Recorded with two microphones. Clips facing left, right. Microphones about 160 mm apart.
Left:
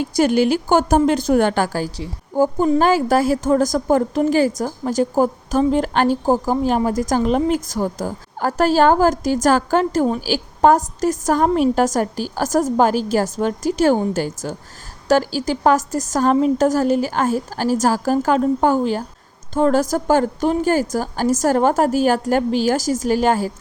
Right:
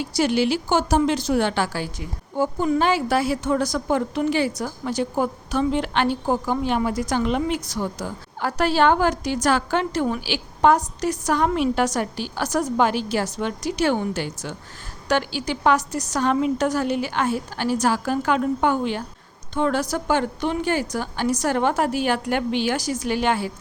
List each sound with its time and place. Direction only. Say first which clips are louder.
0.0 s a woman's voice: left 5 dB; 50° left (ahead or behind)